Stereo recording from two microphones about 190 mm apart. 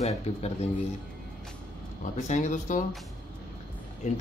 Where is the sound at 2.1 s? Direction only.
40° left (ahead or behind).